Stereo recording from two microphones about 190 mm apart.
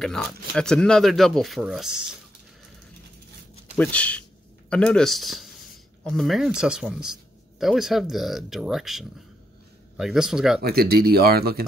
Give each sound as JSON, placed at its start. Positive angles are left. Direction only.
{"t": 0.0, "sound": "speech", "side_deg": 5}
{"t": 3.7, "sound": "speech", "side_deg": 5}
{"t": 10.6, "sound": "speech", "side_deg": -55}